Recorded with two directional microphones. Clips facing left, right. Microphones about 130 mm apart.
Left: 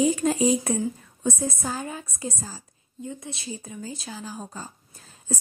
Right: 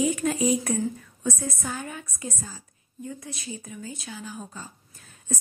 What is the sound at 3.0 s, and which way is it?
Speech, 25° left (ahead or behind).